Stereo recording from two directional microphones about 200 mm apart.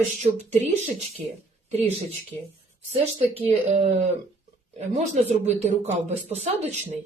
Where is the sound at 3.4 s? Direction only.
30° right (ahead or behind).